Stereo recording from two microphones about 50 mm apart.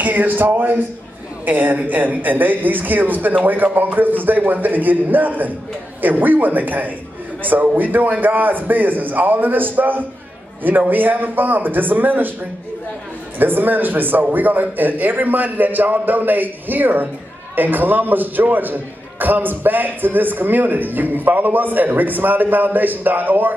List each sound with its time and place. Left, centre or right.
0.0 s a man's voice: right
13.4 s a man's voice: right